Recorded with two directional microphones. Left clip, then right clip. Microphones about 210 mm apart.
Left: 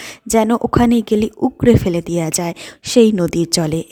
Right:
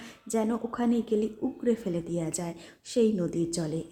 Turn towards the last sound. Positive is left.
turn(degrees=50)  # may be behind; listen again after turning